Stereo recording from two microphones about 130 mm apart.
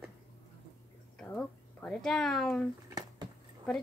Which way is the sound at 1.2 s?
10° left (ahead or behind).